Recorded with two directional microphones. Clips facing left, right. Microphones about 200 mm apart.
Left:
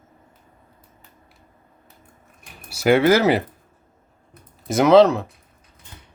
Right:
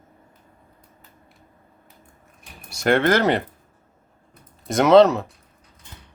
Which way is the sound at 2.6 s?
5° left (ahead or behind).